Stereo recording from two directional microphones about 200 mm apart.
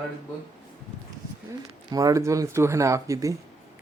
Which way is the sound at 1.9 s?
15° right (ahead or behind).